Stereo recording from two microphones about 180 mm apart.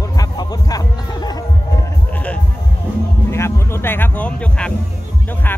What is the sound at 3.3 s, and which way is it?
Music, 15° left (ahead or behind).